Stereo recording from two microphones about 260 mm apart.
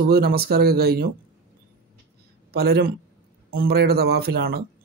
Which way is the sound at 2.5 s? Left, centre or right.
Right.